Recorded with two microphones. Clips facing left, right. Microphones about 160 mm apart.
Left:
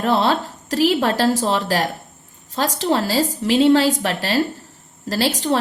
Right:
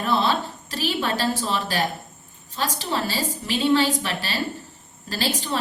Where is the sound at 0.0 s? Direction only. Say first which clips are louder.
Left 4 dB; 85° left.